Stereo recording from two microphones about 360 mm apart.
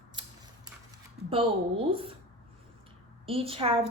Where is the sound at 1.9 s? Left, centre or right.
Centre.